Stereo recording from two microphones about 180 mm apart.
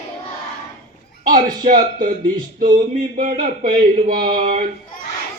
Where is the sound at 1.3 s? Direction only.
50° right (ahead or behind).